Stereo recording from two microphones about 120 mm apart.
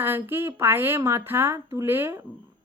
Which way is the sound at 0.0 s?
20° right (ahead or behind).